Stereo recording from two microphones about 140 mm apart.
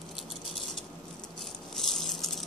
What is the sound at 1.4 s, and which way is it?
Rattle, centre (ahead or behind).